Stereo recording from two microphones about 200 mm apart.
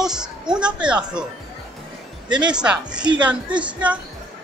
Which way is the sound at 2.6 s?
5° right (ahead or behind).